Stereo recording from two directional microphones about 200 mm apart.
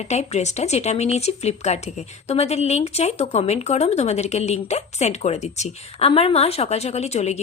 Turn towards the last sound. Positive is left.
turn(degrees=35)  # may be behind; listen again after turning